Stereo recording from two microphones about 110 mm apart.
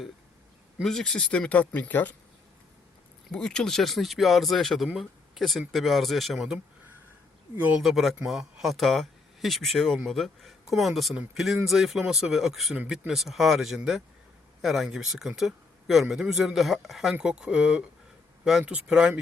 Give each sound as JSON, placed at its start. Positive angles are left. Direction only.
{"t": 0.8, "sound": "speech", "side_deg": 5}
{"t": 3.3, "sound": "speech", "side_deg": 5}
{"t": 7.5, "sound": "speech", "side_deg": -15}
{"t": 7.8, "sound": "speech", "side_deg": 0}